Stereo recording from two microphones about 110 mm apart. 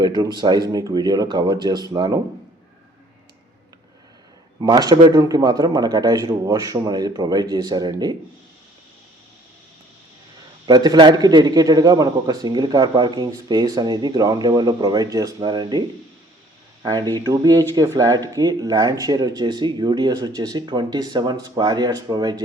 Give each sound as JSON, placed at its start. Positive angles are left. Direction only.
{"t": 0.0, "sound": "a man's voice", "side_deg": -40}
{"t": 4.6, "sound": "a man's voice", "side_deg": -40}
{"t": 10.7, "sound": "a man's voice", "side_deg": -40}
{"t": 16.8, "sound": "a man's voice", "side_deg": -40}